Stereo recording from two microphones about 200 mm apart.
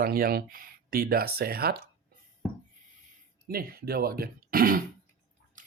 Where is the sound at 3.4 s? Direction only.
50° right (ahead or behind).